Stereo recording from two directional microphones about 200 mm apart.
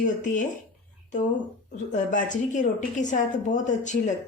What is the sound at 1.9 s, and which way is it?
Speech, 40° left (ahead or behind).